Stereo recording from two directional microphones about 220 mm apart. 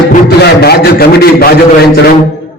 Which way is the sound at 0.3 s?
45° left (ahead or behind).